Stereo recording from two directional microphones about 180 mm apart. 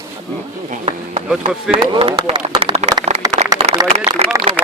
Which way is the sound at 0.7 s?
35° right (ahead or behind).